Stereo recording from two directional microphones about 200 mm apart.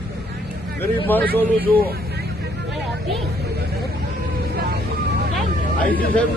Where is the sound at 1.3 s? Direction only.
50° right (ahead or behind).